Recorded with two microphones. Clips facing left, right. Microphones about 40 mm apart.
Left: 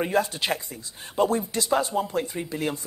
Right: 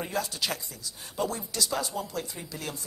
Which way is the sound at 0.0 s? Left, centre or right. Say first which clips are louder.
Left 7 dB; left.